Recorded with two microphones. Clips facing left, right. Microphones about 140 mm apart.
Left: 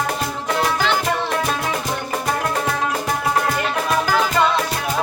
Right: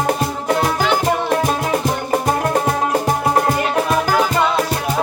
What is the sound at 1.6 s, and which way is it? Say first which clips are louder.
Music: right 5 dB; 40° right (ahead or behind).